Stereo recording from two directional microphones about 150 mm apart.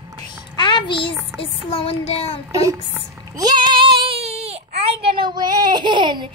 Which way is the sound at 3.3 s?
25° right (ahead or behind).